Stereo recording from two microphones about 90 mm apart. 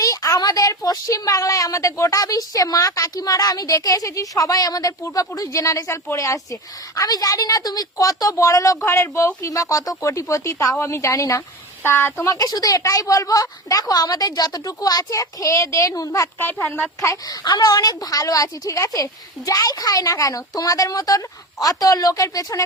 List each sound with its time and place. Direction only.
0.0 s a woman's voice: 40° left (ahead or behind)
11.8 s speech: 25° left (ahead or behind)
12.3 s a woman's voice: 45° left (ahead or behind)
16.4 s a woman's voice: 25° left (ahead or behind)
17.0 s a woman's voice: 35° left (ahead or behind)
17.4 s a woman's voice: 50° left (ahead or behind)